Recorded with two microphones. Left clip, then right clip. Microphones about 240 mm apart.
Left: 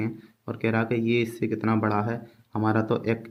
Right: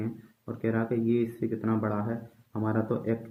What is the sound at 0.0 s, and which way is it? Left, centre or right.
Speech, left.